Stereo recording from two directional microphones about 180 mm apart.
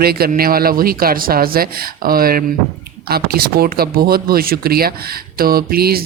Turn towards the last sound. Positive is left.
turn(degrees=-60)  # may be behind; listen again after turning